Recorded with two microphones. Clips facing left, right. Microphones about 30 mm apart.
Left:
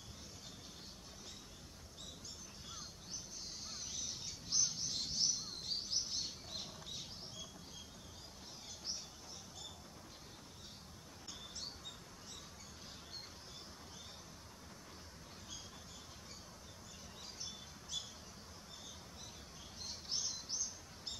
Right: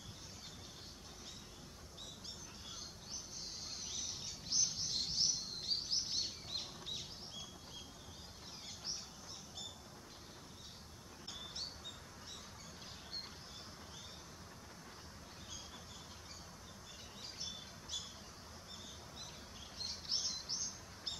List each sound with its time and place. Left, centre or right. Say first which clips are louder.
4.5 s bird: even; centre
6.6 s a sound: right 2 dB; centre
19.8 s bird: right 2 dB; right